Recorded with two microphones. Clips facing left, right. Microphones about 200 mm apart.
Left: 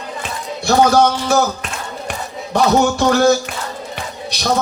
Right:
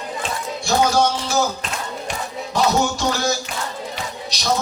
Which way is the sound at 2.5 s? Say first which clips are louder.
Left 5 dB; 60° left (ahead or behind).